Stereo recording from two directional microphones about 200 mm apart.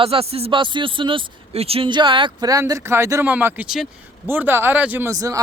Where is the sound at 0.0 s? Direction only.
30° right (ahead or behind).